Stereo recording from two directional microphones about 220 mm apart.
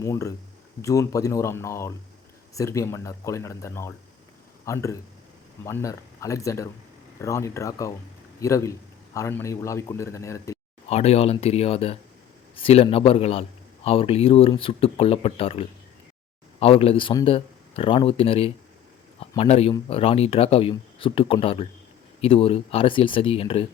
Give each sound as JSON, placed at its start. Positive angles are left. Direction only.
{"t": 0.0, "sound": "a man's voice", "side_deg": 15}
{"t": 10.8, "sound": "speech", "side_deg": 30}